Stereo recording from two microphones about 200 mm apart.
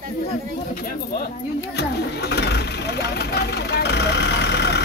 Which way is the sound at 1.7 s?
55° left (ahead or behind).